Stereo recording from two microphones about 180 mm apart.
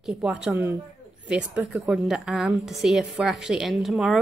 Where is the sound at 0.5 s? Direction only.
15° right (ahead or behind).